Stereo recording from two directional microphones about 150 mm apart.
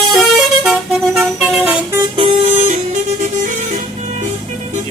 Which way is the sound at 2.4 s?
60° right (ahead or behind).